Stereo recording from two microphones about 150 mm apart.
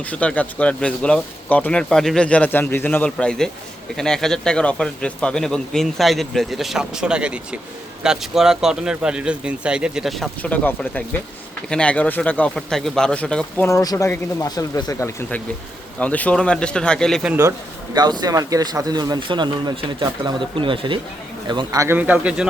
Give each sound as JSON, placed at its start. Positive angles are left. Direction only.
{"t": 0.0, "sound": "a man's voice", "side_deg": 10}
{"t": 13.7, "sound": "speech", "side_deg": 20}
{"t": 16.0, "sound": "a man's voice", "side_deg": 10}
{"t": 17.9, "sound": "speech", "side_deg": -30}
{"t": 21.9, "sound": "a man's voice", "side_deg": -10}